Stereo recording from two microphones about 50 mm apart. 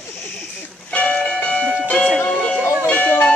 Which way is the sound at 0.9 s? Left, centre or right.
Left.